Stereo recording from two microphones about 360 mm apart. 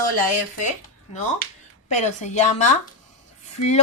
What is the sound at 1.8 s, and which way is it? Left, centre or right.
A woman's voice, centre.